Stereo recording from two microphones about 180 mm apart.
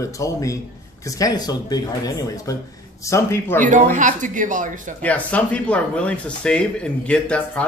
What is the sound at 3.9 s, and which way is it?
Speech, 45° right (ahead or behind).